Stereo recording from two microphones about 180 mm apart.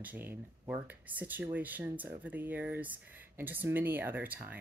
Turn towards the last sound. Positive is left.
turn(degrees=-10)  # may be behind; listen again after turning